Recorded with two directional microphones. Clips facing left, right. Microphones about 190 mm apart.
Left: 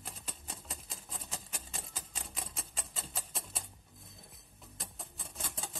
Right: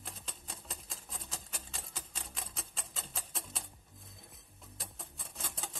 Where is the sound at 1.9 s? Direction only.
Centre (ahead or behind).